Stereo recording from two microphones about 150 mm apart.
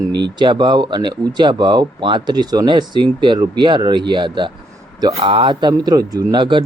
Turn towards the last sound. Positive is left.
turn(degrees=-30)  # may be behind; listen again after turning